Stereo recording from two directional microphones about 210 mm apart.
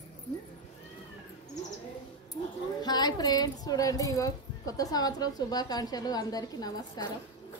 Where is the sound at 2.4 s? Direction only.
25° left (ahead or behind).